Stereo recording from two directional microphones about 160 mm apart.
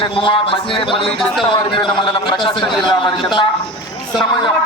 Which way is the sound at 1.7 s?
30° left (ahead or behind).